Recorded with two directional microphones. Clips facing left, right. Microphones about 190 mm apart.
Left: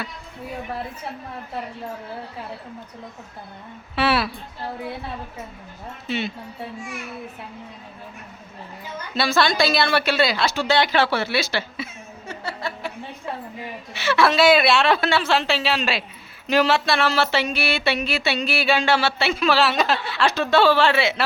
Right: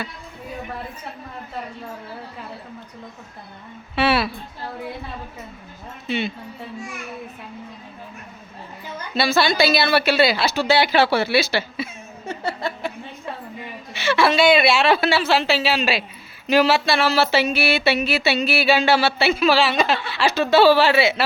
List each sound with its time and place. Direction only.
3.9 s a woman's voice: centre (ahead or behind)
6.1 s speech: centre (ahead or behind)
9.1 s a woman's voice: centre (ahead or behind)
12.3 s a sound: 20° right (ahead or behind)
13.9 s speech: centre (ahead or behind)